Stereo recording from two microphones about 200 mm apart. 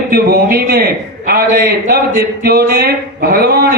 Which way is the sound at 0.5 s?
50° right (ahead or behind).